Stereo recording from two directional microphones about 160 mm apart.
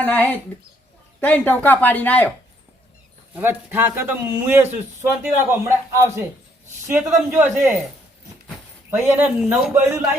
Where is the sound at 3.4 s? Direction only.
10° right (ahead or behind).